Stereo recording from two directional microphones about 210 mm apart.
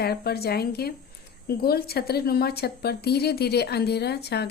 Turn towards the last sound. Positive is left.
turn(degrees=50)  # may be behind; listen again after turning